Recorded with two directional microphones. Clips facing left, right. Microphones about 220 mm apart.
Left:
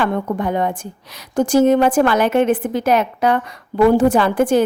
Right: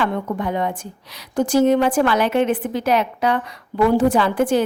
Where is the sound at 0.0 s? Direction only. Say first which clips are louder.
Left 3 dB; 50° left (ahead or behind).